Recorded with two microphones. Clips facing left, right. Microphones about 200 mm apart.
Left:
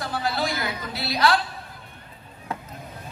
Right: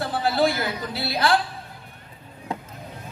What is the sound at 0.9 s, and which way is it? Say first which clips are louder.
Speech: even; 55° right (ahead or behind).